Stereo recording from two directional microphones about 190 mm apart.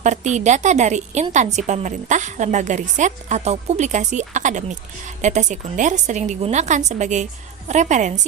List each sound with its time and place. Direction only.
0.0 s a woman's voice: 40° right (ahead or behind)